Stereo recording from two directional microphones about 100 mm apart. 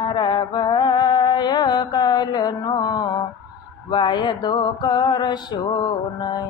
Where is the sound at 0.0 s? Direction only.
50° left (ahead or behind).